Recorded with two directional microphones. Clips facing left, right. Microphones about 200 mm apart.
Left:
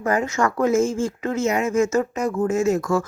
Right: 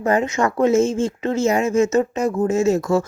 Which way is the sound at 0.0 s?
25° right (ahead or behind).